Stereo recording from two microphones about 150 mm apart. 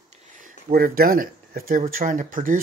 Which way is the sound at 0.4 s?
70° right (ahead or behind).